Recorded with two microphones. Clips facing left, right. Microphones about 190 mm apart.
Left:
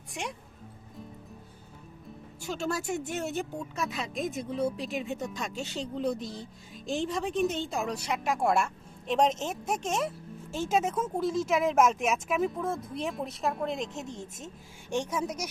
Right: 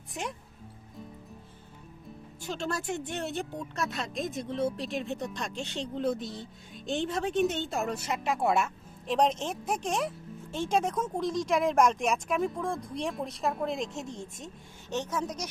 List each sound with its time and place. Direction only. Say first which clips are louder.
0.1 s speech: right 1 dB; centre (ahead or behind)
2.5 s speech: left 1 dB; centre (ahead or behind)